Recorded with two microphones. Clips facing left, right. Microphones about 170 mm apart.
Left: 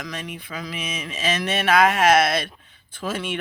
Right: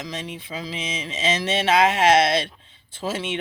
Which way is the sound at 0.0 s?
25° right (ahead or behind).